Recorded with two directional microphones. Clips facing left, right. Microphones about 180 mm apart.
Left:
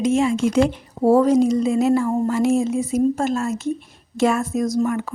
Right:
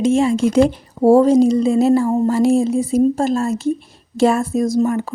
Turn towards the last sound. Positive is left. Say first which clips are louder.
# right 4 dB
turn(degrees=-30)  # may be behind; listen again after turning